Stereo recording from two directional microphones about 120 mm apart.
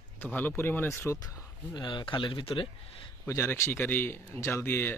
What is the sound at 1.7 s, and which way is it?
Speech, 40° left (ahead or behind).